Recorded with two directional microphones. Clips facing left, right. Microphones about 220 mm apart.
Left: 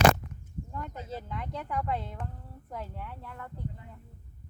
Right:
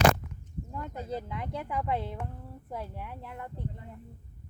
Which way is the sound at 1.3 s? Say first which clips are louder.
Right 1 dB; 10° right (ahead or behind).